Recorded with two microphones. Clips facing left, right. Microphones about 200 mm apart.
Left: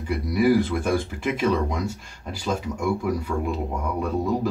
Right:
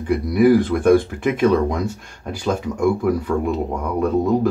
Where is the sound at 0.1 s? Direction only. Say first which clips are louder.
Right 6 dB; 55° right (ahead or behind).